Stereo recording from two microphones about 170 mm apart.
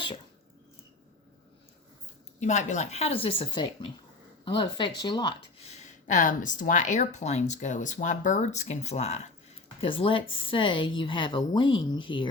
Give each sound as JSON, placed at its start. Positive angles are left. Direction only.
{"t": 2.4, "sound": "a woman's voice", "side_deg": 45}
{"t": 5.7, "sound": "a woman's voice", "side_deg": 45}